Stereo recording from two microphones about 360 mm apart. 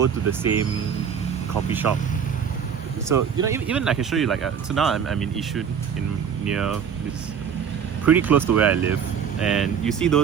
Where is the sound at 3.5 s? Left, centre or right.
Centre.